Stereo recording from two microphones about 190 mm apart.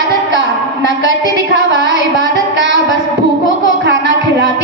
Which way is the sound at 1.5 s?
70° right (ahead or behind).